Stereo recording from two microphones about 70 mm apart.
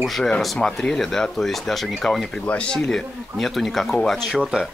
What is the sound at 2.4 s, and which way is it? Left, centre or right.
Speech, left.